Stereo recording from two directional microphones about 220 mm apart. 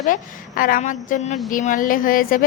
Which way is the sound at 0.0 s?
40° left (ahead or behind).